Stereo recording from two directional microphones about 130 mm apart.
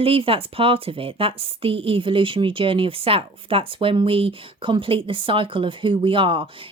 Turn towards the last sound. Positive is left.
turn(degrees=-45)  # may be behind; listen again after turning